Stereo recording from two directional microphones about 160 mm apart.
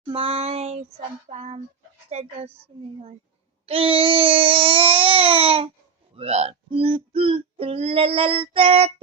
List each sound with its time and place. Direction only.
0.0 s speech: 35° right (ahead or behind)
3.7 s speech: 35° right (ahead or behind)